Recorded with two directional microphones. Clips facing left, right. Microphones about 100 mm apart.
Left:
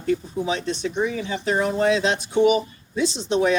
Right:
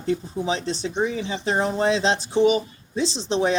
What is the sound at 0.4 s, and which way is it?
Speech, 35° right (ahead or behind).